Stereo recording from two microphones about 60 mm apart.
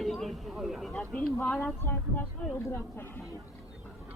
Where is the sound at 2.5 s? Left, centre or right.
Left.